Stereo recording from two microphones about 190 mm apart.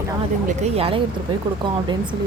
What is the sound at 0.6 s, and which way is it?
Speech, 30° right (ahead or behind).